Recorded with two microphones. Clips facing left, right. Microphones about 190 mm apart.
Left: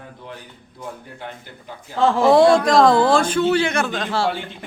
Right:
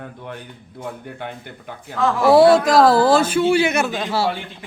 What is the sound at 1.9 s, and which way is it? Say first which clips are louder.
Speech: left 2 dB; 30° left (ahead or behind).